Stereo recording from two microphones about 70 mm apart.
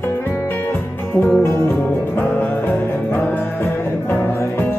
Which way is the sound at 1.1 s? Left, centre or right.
Left.